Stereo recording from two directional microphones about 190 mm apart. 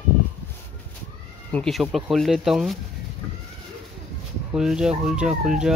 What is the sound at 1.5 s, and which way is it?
Speech, centre (ahead or behind).